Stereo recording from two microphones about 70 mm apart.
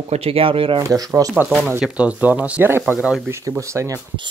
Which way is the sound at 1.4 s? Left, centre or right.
Centre.